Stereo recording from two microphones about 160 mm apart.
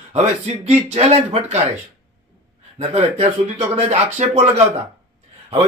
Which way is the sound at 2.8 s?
40° right (ahead or behind).